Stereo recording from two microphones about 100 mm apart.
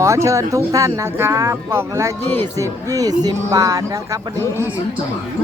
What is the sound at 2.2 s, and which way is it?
Speech, 20° left (ahead or behind).